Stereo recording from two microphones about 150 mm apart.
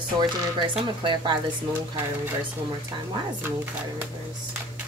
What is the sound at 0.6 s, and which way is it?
Speech, 30° right (ahead or behind).